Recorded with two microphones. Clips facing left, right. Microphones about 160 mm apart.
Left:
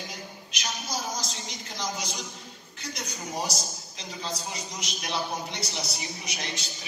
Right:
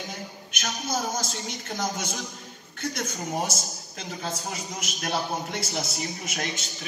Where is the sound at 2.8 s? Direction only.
50° right (ahead or behind).